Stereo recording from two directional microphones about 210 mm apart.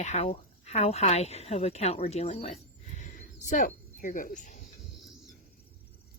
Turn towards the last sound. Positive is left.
turn(degrees=40)  # may be behind; listen again after turning